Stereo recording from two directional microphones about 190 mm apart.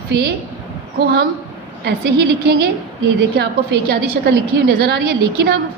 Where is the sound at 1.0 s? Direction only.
55° right (ahead or behind).